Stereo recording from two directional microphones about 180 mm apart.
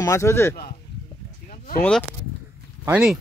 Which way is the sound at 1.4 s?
50° left (ahead or behind).